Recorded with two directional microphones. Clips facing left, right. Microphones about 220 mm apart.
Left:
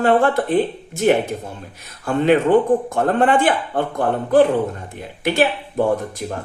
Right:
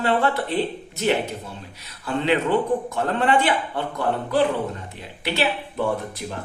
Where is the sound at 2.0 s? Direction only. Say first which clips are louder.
Left 6 dB; 50° left (ahead or behind).